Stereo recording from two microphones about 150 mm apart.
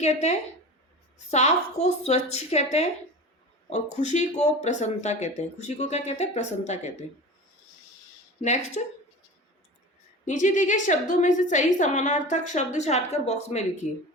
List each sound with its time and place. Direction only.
0.0 s speech: 50° left (ahead or behind)
8.4 s speech: 50° left (ahead or behind)
10.2 s a woman's voice: 55° left (ahead or behind)